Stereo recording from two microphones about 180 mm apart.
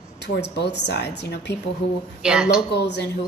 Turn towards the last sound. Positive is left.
turn(degrees=70)  # may be behind; listen again after turning